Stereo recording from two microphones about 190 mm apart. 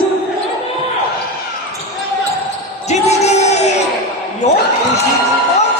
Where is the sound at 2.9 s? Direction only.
35° left (ahead or behind).